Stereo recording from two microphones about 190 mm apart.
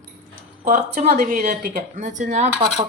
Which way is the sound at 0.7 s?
35° right (ahead or behind).